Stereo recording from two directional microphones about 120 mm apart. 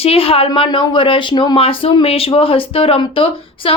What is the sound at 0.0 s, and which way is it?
A woman's voice, 55° left (ahead or behind).